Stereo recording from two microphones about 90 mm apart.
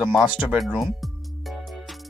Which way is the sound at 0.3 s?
15° right (ahead or behind).